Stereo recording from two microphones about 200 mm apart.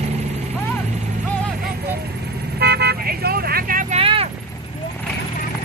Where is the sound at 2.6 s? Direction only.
55° right (ahead or behind).